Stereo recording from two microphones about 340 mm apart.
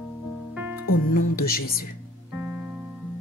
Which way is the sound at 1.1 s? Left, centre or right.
Left.